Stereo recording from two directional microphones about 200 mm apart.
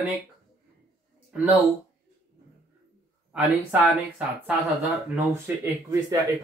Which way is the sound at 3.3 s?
5° right (ahead or behind).